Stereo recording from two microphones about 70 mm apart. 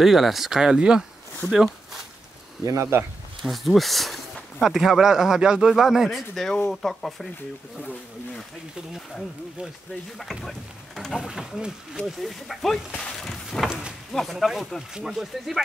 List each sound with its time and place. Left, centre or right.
0.0 s speech: centre
2.6 s speech: right
3.4 s speech: centre
8.9 s speech: centre
11.1 s speech: centre
12.9 s a sound: centre
13.7 s speech: centre
14.1 s speech: centre